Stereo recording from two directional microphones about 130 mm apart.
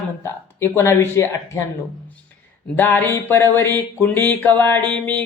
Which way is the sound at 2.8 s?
15° left (ahead or behind).